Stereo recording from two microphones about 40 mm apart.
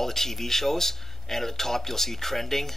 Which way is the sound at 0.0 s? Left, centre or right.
Centre.